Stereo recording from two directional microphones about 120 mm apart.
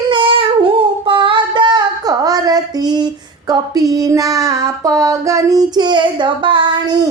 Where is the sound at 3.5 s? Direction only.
30° right (ahead or behind).